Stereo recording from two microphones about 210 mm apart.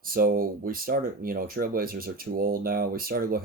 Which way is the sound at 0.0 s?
45° right (ahead or behind).